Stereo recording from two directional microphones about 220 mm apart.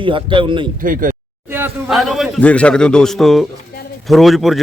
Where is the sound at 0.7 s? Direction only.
40° right (ahead or behind).